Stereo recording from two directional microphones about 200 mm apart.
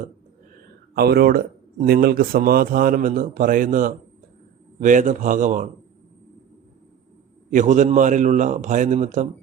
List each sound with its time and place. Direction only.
0.9 s a man's voice: 50° right (ahead or behind)
7.5 s a man's voice: 40° right (ahead or behind)